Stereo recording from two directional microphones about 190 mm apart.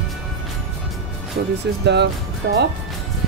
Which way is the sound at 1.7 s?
65° right (ahead or behind).